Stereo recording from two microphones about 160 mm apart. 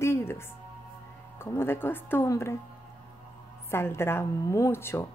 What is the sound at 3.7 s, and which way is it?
A woman's voice, 15° left (ahead or behind).